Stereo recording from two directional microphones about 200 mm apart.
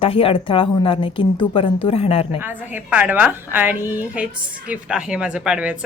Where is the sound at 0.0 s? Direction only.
25° left (ahead or behind).